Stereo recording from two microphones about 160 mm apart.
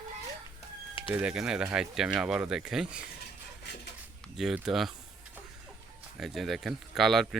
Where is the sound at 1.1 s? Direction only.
5° right (ahead or behind).